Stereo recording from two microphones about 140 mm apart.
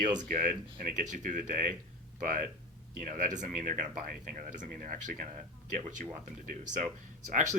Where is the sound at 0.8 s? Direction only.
65° right (ahead or behind).